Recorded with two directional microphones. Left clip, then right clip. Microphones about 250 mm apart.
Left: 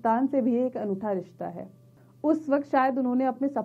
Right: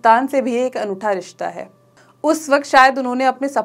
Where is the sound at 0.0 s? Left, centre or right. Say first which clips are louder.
Right 11 dB; centre.